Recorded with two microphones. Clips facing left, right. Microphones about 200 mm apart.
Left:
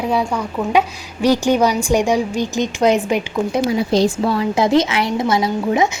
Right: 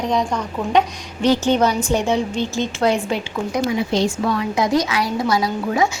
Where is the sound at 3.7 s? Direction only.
35° left (ahead or behind).